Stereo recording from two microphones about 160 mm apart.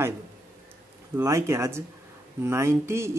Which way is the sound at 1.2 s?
20° right (ahead or behind).